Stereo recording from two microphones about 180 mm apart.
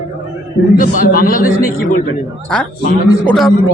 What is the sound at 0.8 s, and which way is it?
Speech, 50° left (ahead or behind).